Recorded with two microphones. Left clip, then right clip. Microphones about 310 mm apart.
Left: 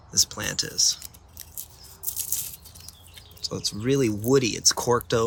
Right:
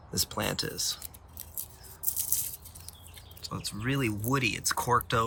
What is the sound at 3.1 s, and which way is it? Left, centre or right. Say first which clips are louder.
Speech: left 8 dB; centre.